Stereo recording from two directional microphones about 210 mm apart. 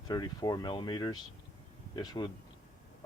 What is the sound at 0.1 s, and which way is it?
Speech, 20° left (ahead or behind).